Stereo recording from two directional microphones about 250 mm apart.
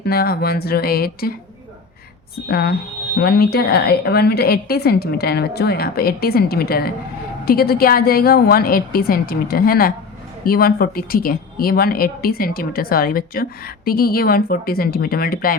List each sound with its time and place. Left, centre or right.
0.0 s speech: left
2.5 s speech: left